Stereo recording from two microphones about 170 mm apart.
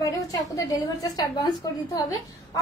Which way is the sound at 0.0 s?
20° left (ahead or behind).